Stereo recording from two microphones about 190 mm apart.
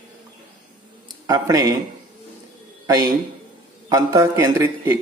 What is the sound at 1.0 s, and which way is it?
Speech, 20° right (ahead or behind).